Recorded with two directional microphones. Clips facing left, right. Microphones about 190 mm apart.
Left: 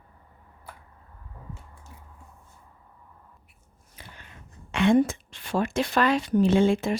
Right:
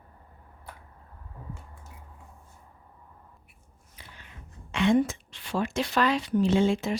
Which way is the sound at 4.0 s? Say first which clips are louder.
Left 3 dB; 50° left (ahead or behind).